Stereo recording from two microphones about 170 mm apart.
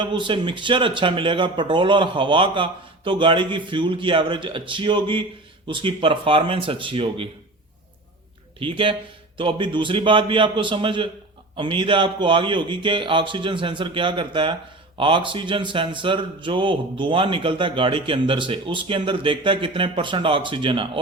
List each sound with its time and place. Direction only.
0.0 s a man's voice: 30° right (ahead or behind)
8.5 s a man's voice: 30° right (ahead or behind)